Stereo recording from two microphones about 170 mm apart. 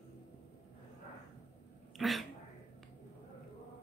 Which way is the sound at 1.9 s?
Centre (ahead or behind).